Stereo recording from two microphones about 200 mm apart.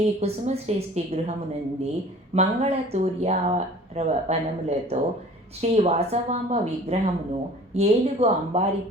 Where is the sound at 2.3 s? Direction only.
30° right (ahead or behind).